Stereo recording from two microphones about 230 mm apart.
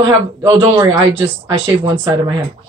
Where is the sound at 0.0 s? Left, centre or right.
Centre.